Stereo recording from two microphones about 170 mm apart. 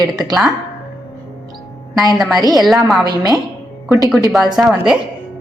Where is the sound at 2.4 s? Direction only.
25° right (ahead or behind).